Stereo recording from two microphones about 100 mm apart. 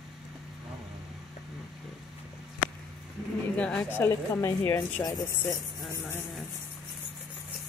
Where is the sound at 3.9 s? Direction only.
25° left (ahead or behind).